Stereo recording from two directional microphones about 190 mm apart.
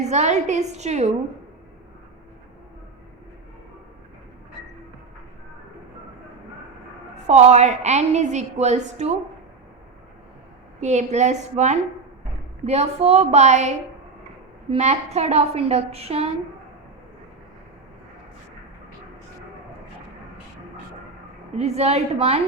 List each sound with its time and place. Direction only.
0.0 s a woman's voice: 35° right (ahead or behind)
7.3 s a woman's voice: 35° right (ahead or behind)
10.8 s a woman's voice: 35° right (ahead or behind)
21.5 s a woman's voice: 35° right (ahead or behind)